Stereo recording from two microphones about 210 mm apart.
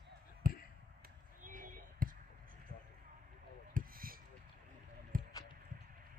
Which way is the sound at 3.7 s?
45° right (ahead or behind).